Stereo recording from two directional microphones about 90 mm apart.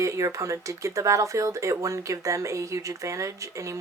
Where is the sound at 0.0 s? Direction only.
35° right (ahead or behind).